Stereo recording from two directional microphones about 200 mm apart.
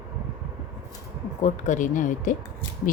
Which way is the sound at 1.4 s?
35° left (ahead or behind).